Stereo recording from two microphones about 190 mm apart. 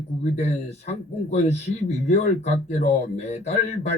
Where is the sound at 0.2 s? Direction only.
35° left (ahead or behind).